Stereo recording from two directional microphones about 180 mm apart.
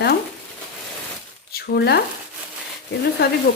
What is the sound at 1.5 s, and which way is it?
Speech, 60° left (ahead or behind).